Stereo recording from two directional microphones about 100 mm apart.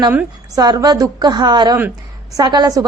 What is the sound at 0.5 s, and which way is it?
A woman's voice, 40° right (ahead or behind).